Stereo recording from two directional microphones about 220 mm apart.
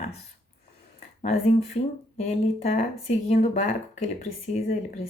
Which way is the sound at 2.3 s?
30° left (ahead or behind).